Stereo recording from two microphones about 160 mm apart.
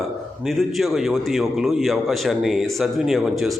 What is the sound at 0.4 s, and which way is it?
A man's voice, centre (ahead or behind).